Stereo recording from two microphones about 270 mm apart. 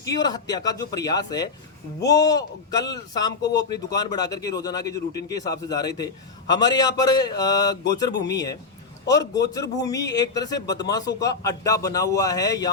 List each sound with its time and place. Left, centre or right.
0.0 s speech: centre
8.1 s speech: left
9.0 s speech: centre